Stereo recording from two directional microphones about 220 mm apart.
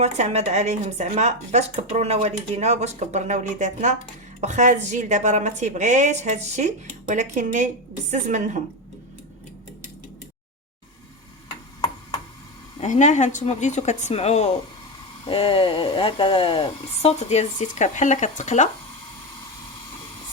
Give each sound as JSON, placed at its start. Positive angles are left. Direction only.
{"t": 0.0, "sound": "speech", "side_deg": -30}
{"t": 12.8, "sound": "a woman's voice", "side_deg": 35}